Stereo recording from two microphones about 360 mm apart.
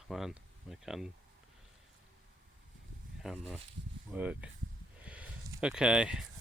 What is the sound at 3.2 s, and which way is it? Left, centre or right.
Speech, centre.